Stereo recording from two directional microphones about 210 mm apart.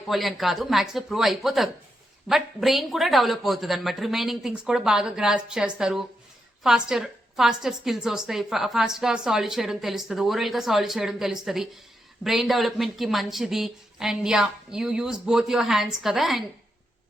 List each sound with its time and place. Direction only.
0.1 s a woman's voice: centre (ahead or behind)